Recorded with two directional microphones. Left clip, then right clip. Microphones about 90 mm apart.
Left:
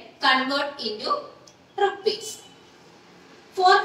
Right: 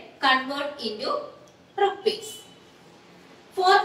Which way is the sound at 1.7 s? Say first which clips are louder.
Even; 30° left (ahead or behind).